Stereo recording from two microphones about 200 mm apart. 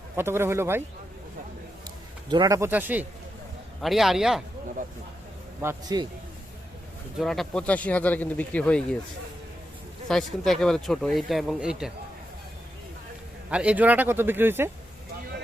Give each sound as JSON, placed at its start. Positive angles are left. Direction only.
{"t": 0.2, "sound": "speech", "side_deg": -10}
{"t": 2.3, "sound": "speech", "side_deg": -20}
{"t": 5.6, "sound": "a man's voice", "side_deg": -20}
{"t": 7.2, "sound": "speech", "side_deg": 0}
{"t": 10.1, "sound": "speech", "side_deg": 0}
{"t": 13.5, "sound": "speech", "side_deg": -5}